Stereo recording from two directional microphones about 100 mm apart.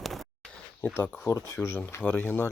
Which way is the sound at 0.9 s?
20° left (ahead or behind).